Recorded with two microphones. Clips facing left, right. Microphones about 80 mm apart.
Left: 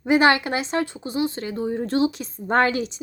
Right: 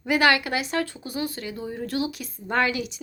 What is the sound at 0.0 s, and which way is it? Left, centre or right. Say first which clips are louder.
A woman's voice: left 3 dB; left.